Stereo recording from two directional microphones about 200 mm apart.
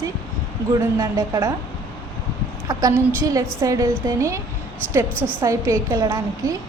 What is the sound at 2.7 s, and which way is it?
A woman's voice, 20° right (ahead or behind).